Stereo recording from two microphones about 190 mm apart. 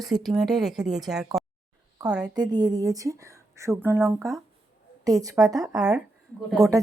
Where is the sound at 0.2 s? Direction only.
Centre (ahead or behind).